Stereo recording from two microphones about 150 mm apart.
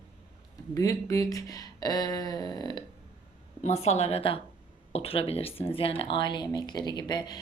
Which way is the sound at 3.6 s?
45° left (ahead or behind).